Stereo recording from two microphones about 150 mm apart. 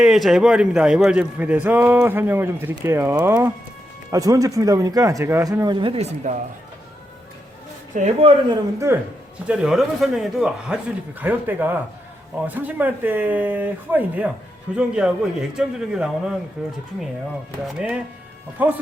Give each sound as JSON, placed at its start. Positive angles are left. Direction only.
{"t": 0.0, "sound": "a man's voice", "side_deg": 0}
{"t": 7.9, "sound": "speech", "side_deg": -45}
{"t": 9.5, "sound": "a man's voice", "side_deg": -5}